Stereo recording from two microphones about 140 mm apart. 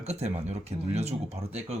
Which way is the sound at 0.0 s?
50° right (ahead or behind).